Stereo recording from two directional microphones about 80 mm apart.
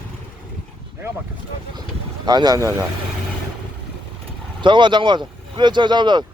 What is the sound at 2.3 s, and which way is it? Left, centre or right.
Speech, right.